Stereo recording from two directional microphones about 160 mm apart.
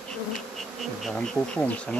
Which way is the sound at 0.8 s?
Centre (ahead or behind).